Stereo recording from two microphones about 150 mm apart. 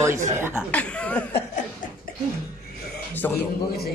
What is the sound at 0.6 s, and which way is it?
Speech, 10° left (ahead or behind).